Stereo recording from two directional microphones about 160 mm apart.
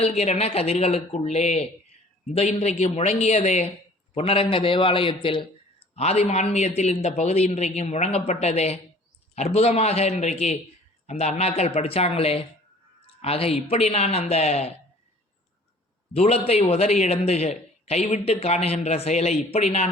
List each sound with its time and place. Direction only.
0.0 s a man's voice: 40° left (ahead or behind)
16.1 s a man's voice: 40° left (ahead or behind)